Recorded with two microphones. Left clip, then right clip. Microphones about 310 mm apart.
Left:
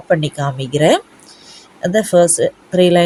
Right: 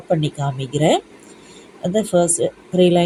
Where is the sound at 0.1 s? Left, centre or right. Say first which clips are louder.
Left 5 dB; centre.